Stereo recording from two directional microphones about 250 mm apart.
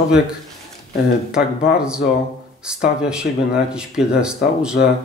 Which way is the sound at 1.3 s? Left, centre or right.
Centre.